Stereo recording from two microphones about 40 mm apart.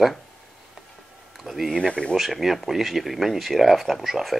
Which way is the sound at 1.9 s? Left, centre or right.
Left.